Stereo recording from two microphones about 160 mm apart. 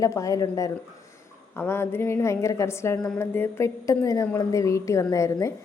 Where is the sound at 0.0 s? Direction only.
20° left (ahead or behind).